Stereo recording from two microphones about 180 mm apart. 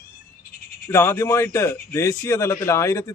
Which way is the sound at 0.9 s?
15° left (ahead or behind).